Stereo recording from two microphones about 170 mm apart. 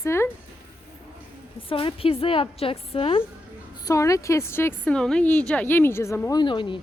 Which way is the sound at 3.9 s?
20° left (ahead or behind).